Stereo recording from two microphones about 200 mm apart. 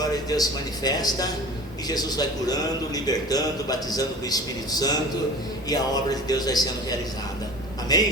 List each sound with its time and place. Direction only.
0.0 s a man's voice: 20° left (ahead or behind)
7.9 s a man's voice: 20° left (ahead or behind)